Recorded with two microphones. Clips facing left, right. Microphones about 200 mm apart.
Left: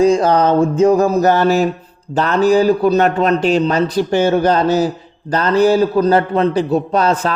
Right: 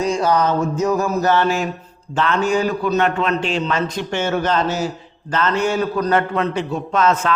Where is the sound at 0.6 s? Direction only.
30° left (ahead or behind).